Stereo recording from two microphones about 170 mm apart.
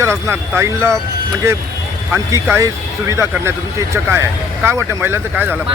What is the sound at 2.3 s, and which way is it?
Speech, 15° right (ahead or behind).